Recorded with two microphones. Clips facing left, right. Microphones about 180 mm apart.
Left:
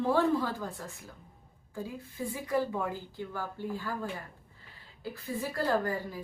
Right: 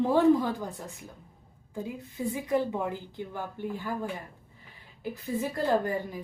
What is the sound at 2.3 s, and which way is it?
Speech, 20° right (ahead or behind).